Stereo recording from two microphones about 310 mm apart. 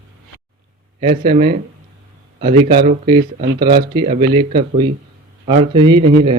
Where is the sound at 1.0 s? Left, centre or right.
Right.